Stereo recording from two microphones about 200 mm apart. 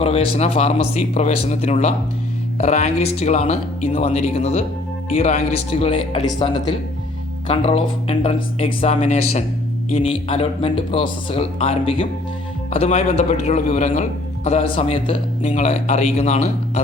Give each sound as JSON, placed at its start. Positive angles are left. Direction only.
{"t": 0.0, "sound": "a man's voice", "side_deg": 30}